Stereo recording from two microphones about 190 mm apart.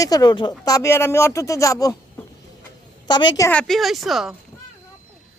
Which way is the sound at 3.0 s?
25° left (ahead or behind).